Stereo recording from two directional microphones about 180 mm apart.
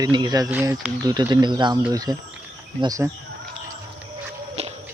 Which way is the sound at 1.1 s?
20° right (ahead or behind).